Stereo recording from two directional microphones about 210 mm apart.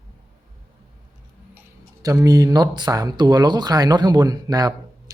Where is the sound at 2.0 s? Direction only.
15° right (ahead or behind).